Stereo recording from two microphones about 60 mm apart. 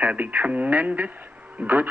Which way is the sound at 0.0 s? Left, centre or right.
Right.